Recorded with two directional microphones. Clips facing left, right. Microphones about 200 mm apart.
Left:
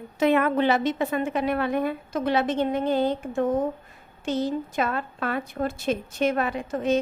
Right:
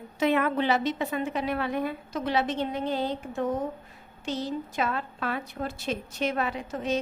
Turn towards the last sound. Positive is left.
turn(degrees=50)  # may be behind; listen again after turning